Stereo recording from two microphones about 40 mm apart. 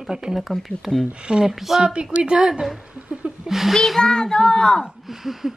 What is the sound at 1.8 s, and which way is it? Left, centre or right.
Speech, right.